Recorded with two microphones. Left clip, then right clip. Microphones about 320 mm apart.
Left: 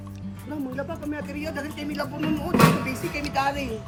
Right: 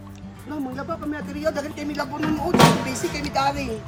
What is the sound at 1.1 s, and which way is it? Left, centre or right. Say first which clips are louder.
Speech: right 6 dB; centre.